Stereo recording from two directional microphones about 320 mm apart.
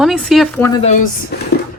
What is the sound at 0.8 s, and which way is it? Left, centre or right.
Speech, left.